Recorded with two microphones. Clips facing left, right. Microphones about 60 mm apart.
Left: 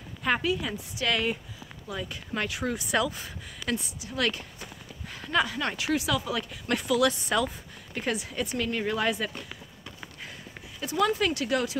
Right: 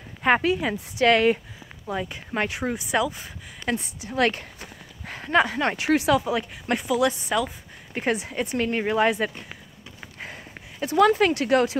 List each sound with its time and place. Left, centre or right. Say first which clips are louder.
0.2 s a woman's voice: right 6 dB; right
1.9 s speech: right 6 dB; right; by 3.3 s centre
3.7 s speech: right 5 dB; right
6.2 s speech: right 5 dB; right
7.9 s speech: right 5 dB; right
10.2 s speech: right 6 dB; right